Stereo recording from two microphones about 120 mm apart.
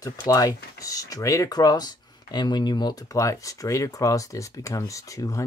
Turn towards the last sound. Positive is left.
turn(degrees=25)  # may be behind; listen again after turning